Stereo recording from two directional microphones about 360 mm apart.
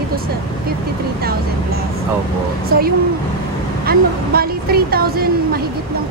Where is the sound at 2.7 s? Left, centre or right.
Right.